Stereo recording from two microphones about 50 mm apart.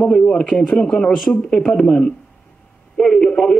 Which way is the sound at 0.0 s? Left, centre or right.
Centre.